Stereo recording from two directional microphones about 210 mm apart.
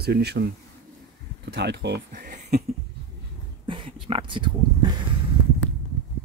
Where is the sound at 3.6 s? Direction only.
25° right (ahead or behind).